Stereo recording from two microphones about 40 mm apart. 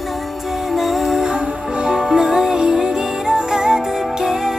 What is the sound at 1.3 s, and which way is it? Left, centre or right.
Music, right.